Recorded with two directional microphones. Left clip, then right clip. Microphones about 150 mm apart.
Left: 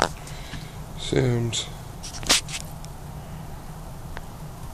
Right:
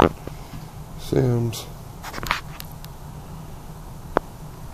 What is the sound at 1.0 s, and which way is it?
Speech, 30° right (ahead or behind).